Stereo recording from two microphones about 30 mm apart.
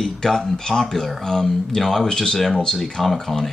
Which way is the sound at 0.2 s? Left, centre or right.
Centre.